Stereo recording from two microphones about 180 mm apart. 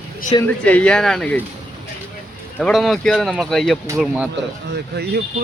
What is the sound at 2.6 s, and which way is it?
Speech, centre (ahead or behind).